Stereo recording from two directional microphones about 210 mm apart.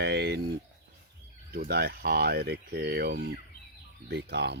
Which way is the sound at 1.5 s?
50° right (ahead or behind).